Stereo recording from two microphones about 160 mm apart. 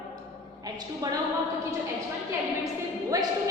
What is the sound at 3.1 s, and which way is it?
Speech, 20° right (ahead or behind).